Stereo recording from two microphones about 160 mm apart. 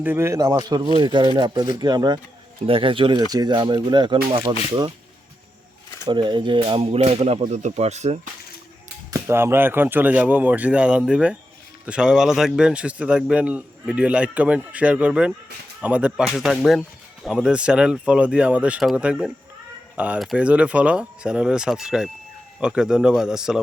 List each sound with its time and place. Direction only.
0.0 s a man's voice: 15° right (ahead or behind); by 4.5 s 35° right (ahead or behind)
6.1 s speech: 30° right (ahead or behind); by 8.3 s 45° right (ahead or behind)
9.0 s a man's voice: 15° right (ahead or behind)